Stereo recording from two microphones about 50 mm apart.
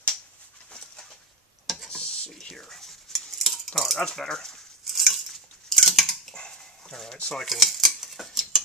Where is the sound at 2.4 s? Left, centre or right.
Centre.